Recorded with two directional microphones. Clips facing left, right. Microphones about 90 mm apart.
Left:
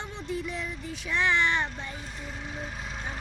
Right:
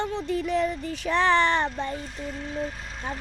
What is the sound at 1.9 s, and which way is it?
Speech, 5° left (ahead or behind).